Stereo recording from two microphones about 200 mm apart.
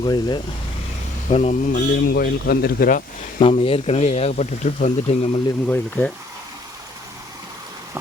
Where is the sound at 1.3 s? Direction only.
35° left (ahead or behind).